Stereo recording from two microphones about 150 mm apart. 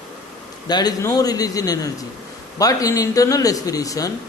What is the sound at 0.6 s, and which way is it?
Speech, 25° left (ahead or behind).